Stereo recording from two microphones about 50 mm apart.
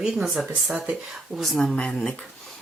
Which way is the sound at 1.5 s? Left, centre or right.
Centre.